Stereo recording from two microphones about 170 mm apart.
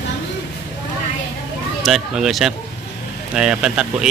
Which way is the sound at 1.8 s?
Centre (ahead or behind).